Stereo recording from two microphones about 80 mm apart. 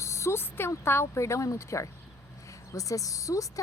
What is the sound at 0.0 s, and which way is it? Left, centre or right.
A woman's voice, left.